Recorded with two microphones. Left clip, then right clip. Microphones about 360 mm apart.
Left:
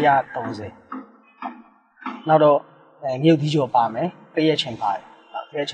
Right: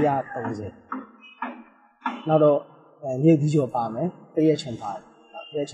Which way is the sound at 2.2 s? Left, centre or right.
Left.